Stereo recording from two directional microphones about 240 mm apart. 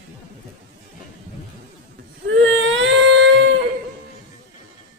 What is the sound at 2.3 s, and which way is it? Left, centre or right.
Baby cry, right.